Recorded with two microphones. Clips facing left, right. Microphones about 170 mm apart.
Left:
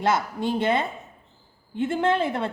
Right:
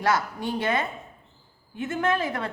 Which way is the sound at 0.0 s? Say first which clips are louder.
Left 2 dB; 25° left (ahead or behind).